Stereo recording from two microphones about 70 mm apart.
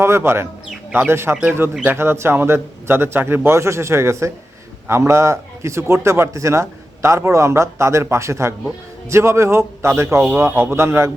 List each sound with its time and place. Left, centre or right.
0.0 s a man's voice: right